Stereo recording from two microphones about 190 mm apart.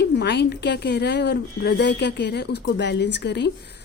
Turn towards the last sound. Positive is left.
turn(degrees=65)  # may be behind; listen again after turning